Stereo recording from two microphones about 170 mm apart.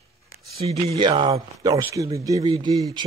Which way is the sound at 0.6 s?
35° right (ahead or behind).